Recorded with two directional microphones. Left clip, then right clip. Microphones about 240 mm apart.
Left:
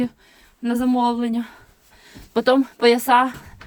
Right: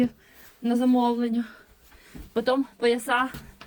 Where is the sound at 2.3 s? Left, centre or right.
Left.